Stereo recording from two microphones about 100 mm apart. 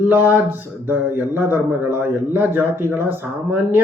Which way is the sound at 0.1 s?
20° right (ahead or behind).